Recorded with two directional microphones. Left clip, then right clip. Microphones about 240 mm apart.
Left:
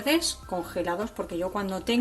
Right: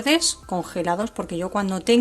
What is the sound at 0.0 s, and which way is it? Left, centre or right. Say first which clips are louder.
Speech: right 5 dB; right.